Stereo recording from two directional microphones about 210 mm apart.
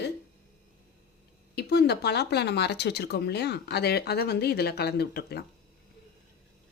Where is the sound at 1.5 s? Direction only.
50° left (ahead or behind).